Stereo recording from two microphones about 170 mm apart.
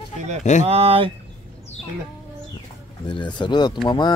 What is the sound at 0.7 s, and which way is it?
Speech, 35° right (ahead or behind).